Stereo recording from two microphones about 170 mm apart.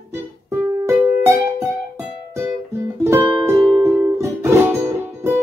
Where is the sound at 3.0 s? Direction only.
15° right (ahead or behind).